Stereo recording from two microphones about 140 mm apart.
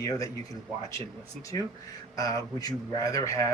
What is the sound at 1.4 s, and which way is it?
Speech, 25° left (ahead or behind).